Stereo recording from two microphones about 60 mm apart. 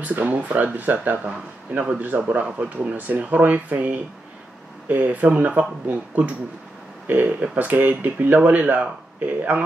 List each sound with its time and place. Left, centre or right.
0.0 s speech: right